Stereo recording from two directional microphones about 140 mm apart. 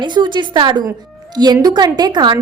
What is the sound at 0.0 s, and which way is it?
A woman's voice, 35° right (ahead or behind).